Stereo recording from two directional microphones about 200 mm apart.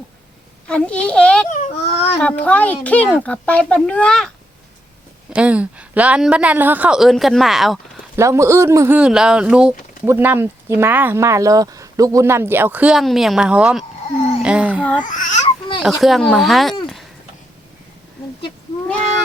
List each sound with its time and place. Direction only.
0.7 s a woman's voice: 5° left (ahead or behind)
1.5 s baby cry: 35° left (ahead or behind)
2.2 s a child's voice: 5° left (ahead or behind)
5.3 s a woman's voice: 5° right (ahead or behind)
8.1 s speech: 15° right (ahead or behind)
14.4 s a sound: 5° right (ahead or behind)
15.0 s speech: 40° left (ahead or behind)
15.8 s a woman's voice: centre (ahead or behind)